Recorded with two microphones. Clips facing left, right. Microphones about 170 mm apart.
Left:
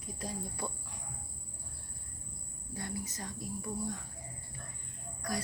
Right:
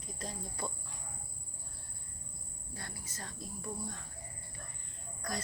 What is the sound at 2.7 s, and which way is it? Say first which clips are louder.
Speech: left 8 dB; 20° left (ahead or behind).